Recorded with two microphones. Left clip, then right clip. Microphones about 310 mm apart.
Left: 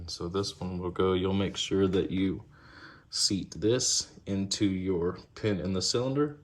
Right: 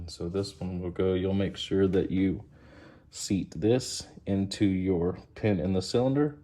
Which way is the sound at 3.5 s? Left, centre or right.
Centre.